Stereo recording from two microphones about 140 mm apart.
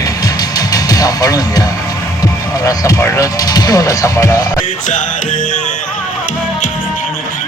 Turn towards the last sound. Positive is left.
turn(degrees=65)  # may be behind; listen again after turning